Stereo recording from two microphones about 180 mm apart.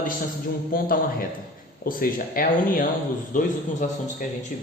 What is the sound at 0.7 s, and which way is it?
Speech, 50° left (ahead or behind).